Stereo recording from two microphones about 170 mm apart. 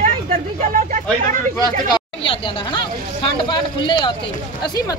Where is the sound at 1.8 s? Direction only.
30° left (ahead or behind).